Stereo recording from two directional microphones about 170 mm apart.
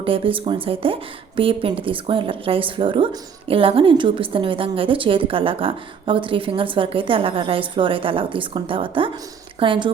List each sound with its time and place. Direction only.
0.0 s speech: 30° right (ahead or behind)